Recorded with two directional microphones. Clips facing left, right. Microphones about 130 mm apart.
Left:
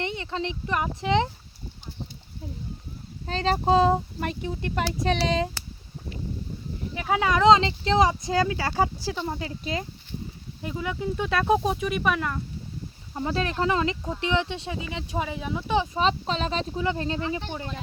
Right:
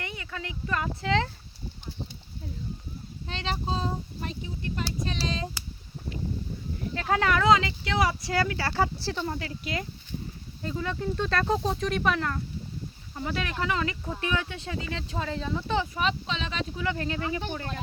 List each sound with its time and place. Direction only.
0.0 s speech: 25° left (ahead or behind)
3.2 s speech: 40° left (ahead or behind)
3.7 s speech: 75° left (ahead or behind)
6.9 s speech: 10° left (ahead or behind)
9.4 s speech: 25° left (ahead or behind)
10.6 s speech: 15° left (ahead or behind)
13.1 s speech: 30° left (ahead or behind); by 15.9 s 15° left (ahead or behind)
16.0 s speech: 35° left (ahead or behind)
16.8 s speech: 25° left (ahead or behind)